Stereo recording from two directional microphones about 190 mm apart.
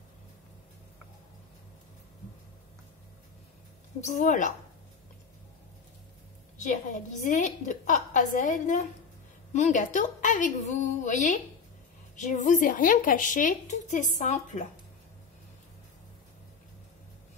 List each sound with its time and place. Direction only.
4.0 s a woman's voice: 40° left (ahead or behind)
6.6 s a woman's voice: 45° left (ahead or behind)